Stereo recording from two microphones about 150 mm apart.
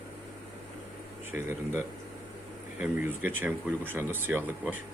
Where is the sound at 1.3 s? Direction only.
15° right (ahead or behind).